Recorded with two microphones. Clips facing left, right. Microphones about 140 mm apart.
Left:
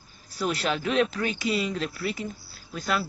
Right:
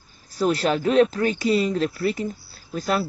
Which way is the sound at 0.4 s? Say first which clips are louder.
Right 6 dB; 40° right (ahead or behind).